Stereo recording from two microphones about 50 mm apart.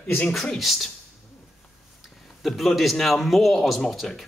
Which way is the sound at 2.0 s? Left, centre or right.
Centre.